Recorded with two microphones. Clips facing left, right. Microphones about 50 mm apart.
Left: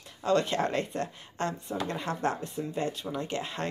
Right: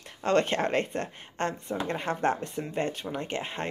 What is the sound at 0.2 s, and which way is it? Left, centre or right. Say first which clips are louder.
Speech: right 1 dB; right.